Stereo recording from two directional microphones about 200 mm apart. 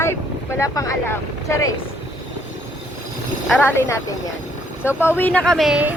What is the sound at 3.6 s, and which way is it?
Speech, 10° left (ahead or behind).